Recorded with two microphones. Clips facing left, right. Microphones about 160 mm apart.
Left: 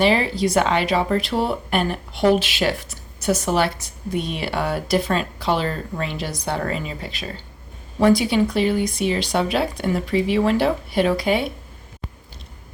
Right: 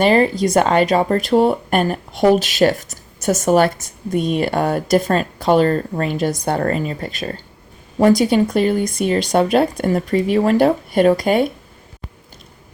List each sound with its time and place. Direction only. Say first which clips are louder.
0.0 s speech: right 4 dB; 45° right (ahead or behind)